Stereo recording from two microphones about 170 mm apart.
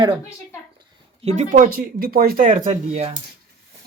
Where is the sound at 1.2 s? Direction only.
35° right (ahead or behind).